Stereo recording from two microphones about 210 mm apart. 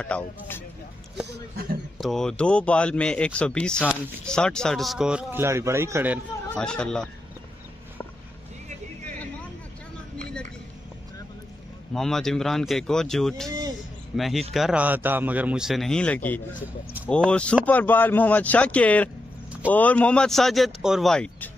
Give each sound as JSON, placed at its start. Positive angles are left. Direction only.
{"t": 0.0, "sound": "speech", "side_deg": 5}
{"t": 2.0, "sound": "speech", "side_deg": 0}
{"t": 6.5, "sound": "speech", "side_deg": 5}
{"t": 11.9, "sound": "speech", "side_deg": 0}
{"t": 13.5, "sound": "a sound", "side_deg": -20}
{"t": 14.1, "sound": "speech", "side_deg": 0}